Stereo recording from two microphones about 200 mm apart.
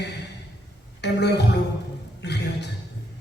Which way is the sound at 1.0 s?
60° left (ahead or behind).